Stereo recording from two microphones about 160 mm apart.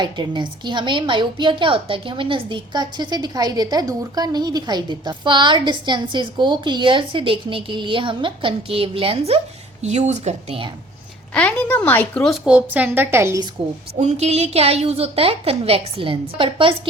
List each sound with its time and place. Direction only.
0.0 s a woman's voice: 30° right (ahead or behind)
11.3 s a woman's voice: 10° left (ahead or behind); by 13.5 s 20° right (ahead or behind)
14.0 s a woman's voice: 45° right (ahead or behind)